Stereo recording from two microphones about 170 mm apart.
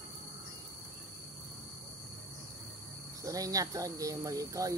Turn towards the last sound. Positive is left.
turn(degrees=-20)  # may be behind; listen again after turning